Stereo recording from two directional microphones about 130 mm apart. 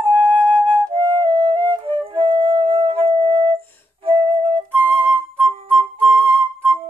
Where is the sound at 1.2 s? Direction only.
50° right (ahead or behind).